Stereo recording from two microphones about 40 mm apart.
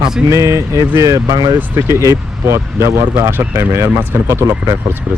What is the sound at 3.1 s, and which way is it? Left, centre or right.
Speech, right.